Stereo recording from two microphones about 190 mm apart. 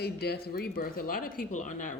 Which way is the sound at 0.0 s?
55° left (ahead or behind).